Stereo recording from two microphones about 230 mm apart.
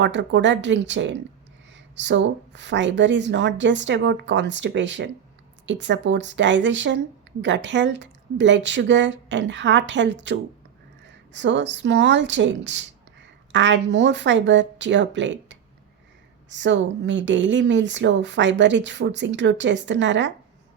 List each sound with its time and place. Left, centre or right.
0.0 s speech: right